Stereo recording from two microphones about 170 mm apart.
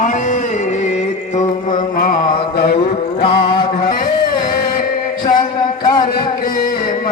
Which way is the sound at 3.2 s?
30° left (ahead or behind).